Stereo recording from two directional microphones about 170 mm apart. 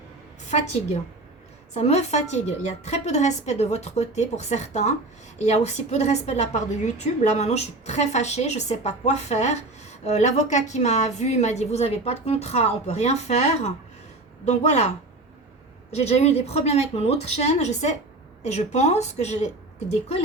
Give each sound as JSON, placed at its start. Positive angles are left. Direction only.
{"t": 0.4, "sound": "a woman's voice", "side_deg": 40}
{"t": 16.0, "sound": "a woman's voice", "side_deg": 40}